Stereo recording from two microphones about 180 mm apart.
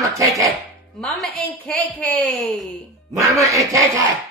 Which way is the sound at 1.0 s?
Centre (ahead or behind).